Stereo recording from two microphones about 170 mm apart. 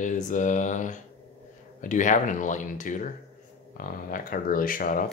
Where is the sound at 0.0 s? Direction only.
50° left (ahead or behind).